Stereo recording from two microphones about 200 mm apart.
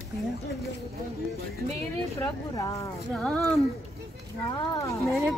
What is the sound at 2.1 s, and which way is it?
Speech, 15° left (ahead or behind).